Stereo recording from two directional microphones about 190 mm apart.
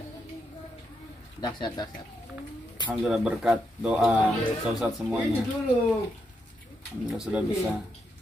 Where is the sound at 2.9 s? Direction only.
5° right (ahead or behind).